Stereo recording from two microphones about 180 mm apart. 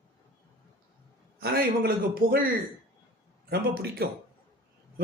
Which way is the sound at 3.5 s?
60° right (ahead or behind).